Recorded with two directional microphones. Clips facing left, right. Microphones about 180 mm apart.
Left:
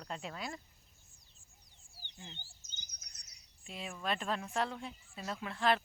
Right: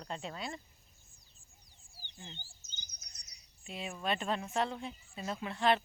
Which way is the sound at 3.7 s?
5° right (ahead or behind).